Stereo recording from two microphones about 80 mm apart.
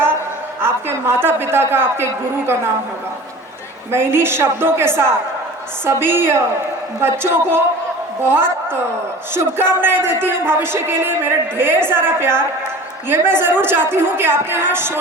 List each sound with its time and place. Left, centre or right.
0.6 s a woman's voice: right
3.9 s a woman's voice: right